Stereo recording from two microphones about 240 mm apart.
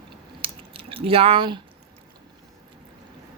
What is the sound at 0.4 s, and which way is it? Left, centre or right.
Drip, right.